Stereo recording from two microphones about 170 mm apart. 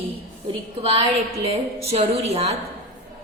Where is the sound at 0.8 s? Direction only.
35° right (ahead or behind).